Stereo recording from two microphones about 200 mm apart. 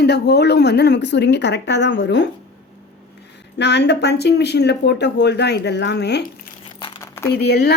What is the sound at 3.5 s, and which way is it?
Speech, 60° left (ahead or behind).